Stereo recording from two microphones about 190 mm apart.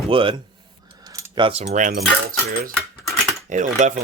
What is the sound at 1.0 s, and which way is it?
Keys jangling, 20° right (ahead or behind).